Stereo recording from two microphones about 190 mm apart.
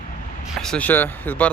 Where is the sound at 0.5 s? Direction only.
5° left (ahead or behind).